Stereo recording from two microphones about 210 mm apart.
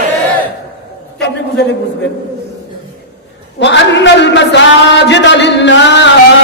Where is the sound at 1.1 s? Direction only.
55° left (ahead or behind).